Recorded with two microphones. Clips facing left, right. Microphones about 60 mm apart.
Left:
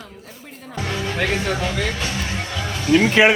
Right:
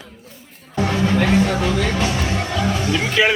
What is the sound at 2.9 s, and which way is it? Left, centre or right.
Speech, left.